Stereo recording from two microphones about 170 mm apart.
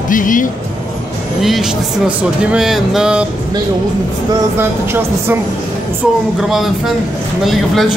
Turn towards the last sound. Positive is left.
turn(degrees=0)  # may be behind; listen again after turning